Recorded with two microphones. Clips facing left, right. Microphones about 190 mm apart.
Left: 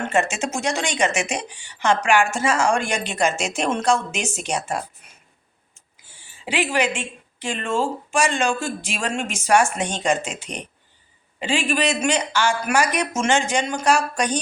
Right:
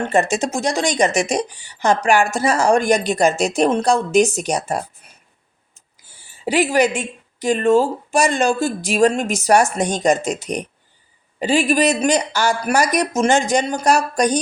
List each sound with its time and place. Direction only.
0.1 s a woman's voice: 35° right (ahead or behind)